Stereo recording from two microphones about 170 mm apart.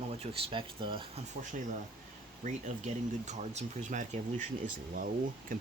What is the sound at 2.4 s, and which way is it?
Speech, 45° right (ahead or behind).